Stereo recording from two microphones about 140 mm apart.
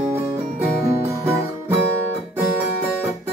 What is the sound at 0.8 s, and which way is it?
Music, 20° right (ahead or behind).